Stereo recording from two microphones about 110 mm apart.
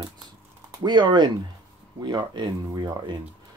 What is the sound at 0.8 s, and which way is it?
Speech, 45° right (ahead or behind).